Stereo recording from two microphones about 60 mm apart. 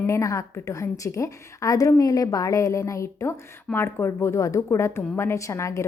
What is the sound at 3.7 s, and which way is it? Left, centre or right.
A woman's voice, left.